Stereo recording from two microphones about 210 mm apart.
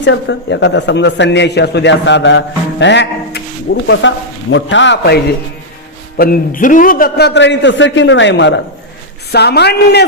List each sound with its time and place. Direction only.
0.0 s a man's voice: 60° left (ahead or behind)
6.1 s a man's voice: 45° left (ahead or behind)